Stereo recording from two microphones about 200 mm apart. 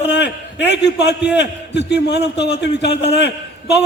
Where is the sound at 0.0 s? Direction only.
60° left (ahead or behind).